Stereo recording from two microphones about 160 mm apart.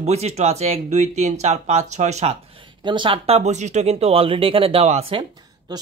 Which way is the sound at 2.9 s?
30° right (ahead or behind).